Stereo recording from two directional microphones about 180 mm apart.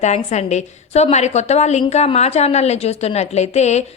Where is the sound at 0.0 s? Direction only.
40° left (ahead or behind).